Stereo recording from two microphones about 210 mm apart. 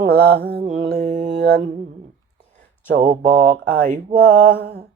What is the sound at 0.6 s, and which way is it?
Mantra, 35° right (ahead or behind).